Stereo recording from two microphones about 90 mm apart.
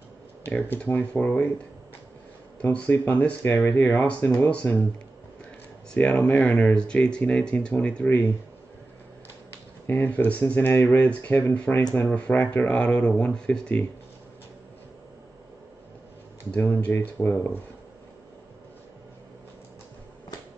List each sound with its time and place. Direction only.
0.5 s speech: 20° left (ahead or behind)
2.6 s speech: 20° left (ahead or behind)
5.9 s speech: 15° left (ahead or behind)
9.8 s speech: 20° left (ahead or behind)
16.5 s speech: 20° left (ahead or behind)